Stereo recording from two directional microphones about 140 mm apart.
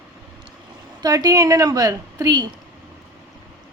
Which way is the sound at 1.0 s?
25° right (ahead or behind).